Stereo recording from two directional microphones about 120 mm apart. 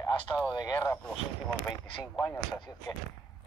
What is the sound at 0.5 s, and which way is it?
Speech, 30° left (ahead or behind).